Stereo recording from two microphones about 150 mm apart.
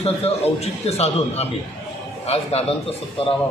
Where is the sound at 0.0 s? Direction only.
45° left (ahead or behind).